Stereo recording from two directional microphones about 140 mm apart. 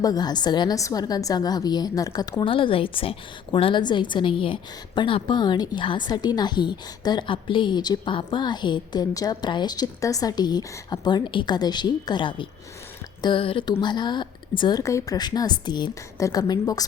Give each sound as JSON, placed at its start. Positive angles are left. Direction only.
{"t": 0.0, "sound": "speech", "side_deg": 30}
{"t": 2.4, "sound": "a woman's voice", "side_deg": 40}